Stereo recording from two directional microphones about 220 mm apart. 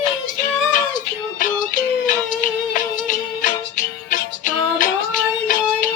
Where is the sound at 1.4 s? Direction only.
35° left (ahead or behind).